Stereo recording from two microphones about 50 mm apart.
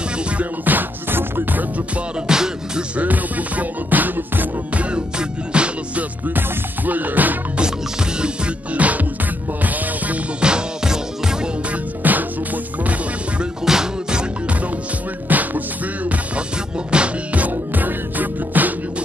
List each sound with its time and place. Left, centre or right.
0.4 s music: right
2.2 s music: centre
3.0 s music: right
4.9 s music: right
6.9 s music: right
7.5 s music: centre; by 10.1 s right
10.4 s music: centre
11.7 s music: right
13.7 s music: centre
15.2 s music: right